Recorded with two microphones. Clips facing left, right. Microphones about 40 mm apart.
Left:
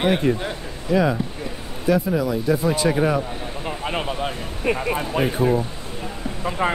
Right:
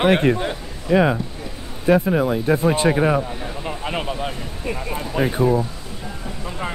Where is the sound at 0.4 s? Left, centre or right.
Centre.